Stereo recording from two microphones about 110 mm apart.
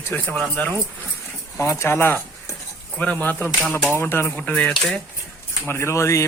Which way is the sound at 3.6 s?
5° left (ahead or behind).